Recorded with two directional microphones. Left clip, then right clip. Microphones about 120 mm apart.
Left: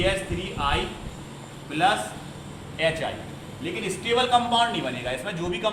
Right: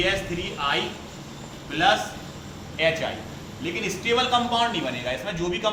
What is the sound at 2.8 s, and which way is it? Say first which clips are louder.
A man's voice: right 2 dB; 25° left (ahead or behind).